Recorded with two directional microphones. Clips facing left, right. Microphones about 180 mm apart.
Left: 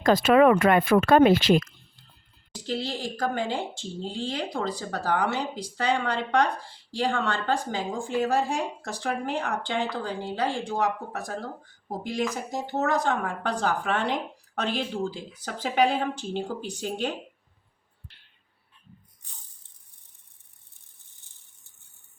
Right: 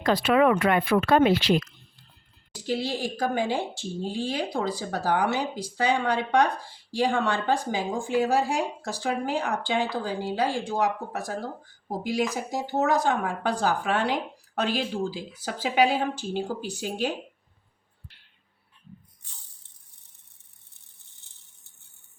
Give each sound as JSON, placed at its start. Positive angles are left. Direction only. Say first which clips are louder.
{"t": 0.0, "sound": "speech", "louder": "left 3 dB", "side_deg": 45}
{"t": 2.5, "sound": "speech", "louder": "right 2 dB", "side_deg": -10}